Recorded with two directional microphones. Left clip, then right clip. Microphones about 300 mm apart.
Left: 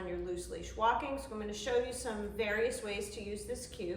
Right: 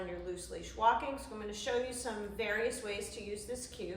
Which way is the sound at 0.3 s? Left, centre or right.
Centre.